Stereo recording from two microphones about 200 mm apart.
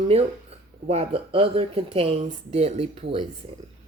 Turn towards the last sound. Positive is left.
turn(degrees=-30)  # may be behind; listen again after turning